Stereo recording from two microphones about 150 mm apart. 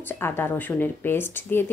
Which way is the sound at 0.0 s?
15° left (ahead or behind).